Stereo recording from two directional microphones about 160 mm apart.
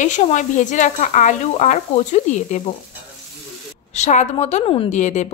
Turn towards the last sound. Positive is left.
turn(degrees=45)  # may be behind; listen again after turning